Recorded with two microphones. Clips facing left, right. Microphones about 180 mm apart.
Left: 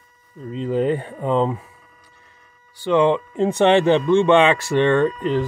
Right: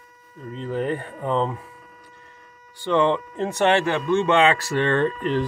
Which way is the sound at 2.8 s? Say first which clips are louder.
Left 3 dB; 15° left (ahead or behind).